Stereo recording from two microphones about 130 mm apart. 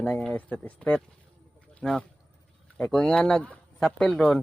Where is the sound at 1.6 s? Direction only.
10° left (ahead or behind).